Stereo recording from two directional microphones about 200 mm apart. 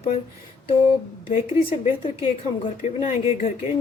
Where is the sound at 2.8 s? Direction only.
35° left (ahead or behind).